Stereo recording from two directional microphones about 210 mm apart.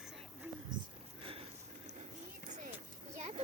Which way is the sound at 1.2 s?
25° right (ahead or behind).